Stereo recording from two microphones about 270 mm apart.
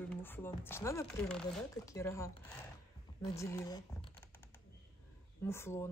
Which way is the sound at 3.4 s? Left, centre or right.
Centre.